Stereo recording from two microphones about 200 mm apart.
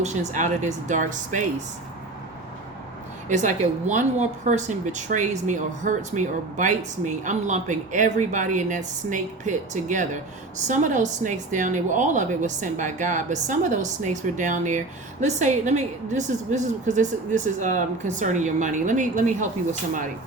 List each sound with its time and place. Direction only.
0.0 s speech: 35° right (ahead or behind)
3.2 s speech: 35° right (ahead or behind)